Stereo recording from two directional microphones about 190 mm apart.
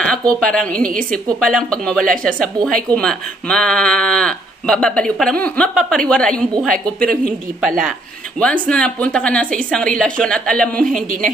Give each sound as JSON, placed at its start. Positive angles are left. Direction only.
{"t": 0.4, "sound": "a woman's voice", "side_deg": 5}
{"t": 10.8, "sound": "a woman's voice", "side_deg": -45}